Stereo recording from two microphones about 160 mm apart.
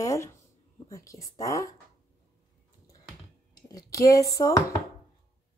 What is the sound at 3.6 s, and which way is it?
Speech, 25° left (ahead or behind).